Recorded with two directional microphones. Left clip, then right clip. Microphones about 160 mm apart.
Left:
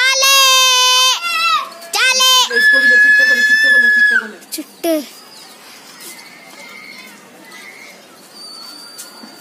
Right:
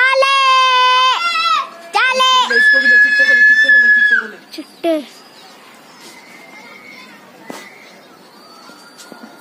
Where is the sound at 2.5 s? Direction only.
85° left.